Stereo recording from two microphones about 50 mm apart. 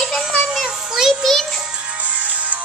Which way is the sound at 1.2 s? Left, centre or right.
Centre.